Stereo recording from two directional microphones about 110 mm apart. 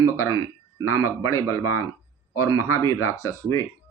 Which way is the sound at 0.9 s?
25° left (ahead or behind).